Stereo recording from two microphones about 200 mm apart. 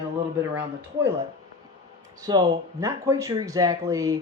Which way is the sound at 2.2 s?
15° right (ahead or behind).